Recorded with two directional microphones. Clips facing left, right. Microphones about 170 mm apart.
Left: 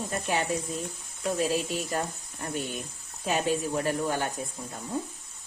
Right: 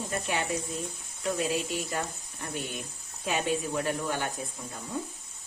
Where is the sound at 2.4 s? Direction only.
40° left (ahead or behind).